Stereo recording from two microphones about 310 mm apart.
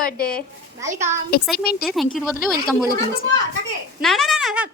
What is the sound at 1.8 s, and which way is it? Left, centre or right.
Speech, centre.